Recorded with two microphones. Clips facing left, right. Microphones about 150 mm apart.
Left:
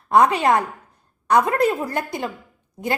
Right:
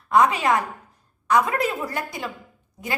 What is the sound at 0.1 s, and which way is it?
A woman's voice, 55° left (ahead or behind).